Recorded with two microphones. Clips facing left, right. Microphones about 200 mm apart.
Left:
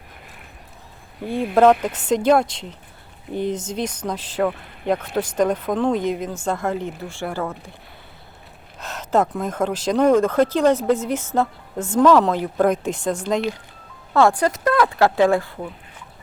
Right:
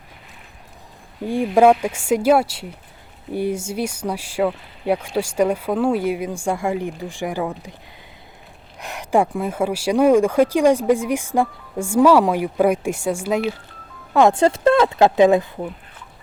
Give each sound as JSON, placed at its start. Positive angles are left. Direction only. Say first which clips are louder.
{"t": 1.2, "sound": "speech", "louder": "right 1 dB", "side_deg": -15}
{"t": 8.8, "sound": "speech", "louder": "right 1 dB", "side_deg": -15}
{"t": 14.1, "sound": "speech", "louder": "right 2 dB", "side_deg": -20}